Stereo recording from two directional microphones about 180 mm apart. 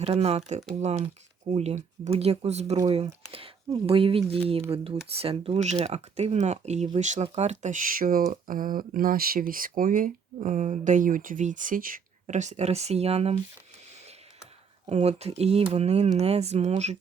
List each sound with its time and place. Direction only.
0.0 s speech: 35° right (ahead or behind)
14.8 s speech: 35° right (ahead or behind)